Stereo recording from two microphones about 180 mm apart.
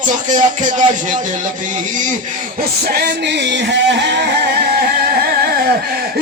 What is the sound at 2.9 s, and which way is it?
Speech, 65° right (ahead or behind).